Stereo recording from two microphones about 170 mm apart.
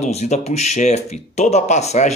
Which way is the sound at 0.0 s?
40° left (ahead or behind).